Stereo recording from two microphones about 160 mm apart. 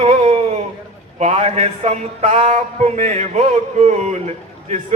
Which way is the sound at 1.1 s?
45° right (ahead or behind).